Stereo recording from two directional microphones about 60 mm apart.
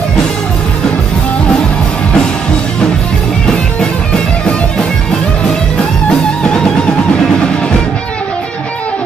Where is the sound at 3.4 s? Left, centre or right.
Centre.